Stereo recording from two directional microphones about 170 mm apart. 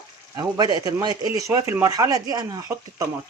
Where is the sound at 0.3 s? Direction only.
25° right (ahead or behind).